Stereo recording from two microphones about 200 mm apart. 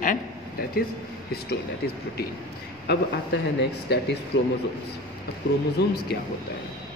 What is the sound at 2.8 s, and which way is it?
Speech, 55° left (ahead or behind).